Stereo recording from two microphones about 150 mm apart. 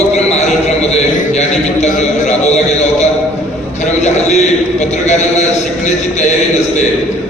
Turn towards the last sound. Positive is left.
turn(degrees=50)  # may be behind; listen again after turning